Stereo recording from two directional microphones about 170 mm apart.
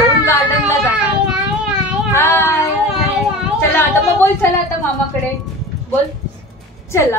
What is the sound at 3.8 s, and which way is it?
Speech, 15° left (ahead or behind).